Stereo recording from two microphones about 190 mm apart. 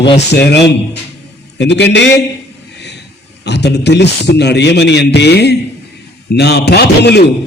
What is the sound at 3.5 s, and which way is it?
A man's voice, 65° left (ahead or behind).